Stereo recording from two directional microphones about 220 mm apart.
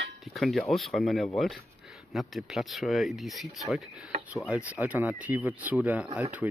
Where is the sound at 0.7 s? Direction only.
Centre (ahead or behind).